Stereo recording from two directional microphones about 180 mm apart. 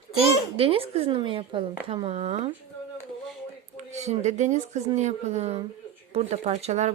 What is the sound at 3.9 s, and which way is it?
Speech, 40° right (ahead or behind).